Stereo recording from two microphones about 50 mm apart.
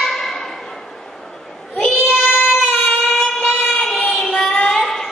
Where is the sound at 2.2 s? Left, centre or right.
Left.